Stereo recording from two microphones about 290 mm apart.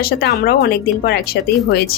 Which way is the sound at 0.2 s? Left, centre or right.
Left.